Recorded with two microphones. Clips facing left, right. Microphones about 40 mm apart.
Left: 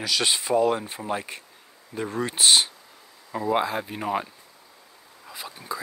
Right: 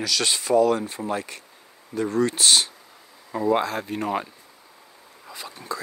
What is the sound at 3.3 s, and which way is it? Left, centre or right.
Speech, centre.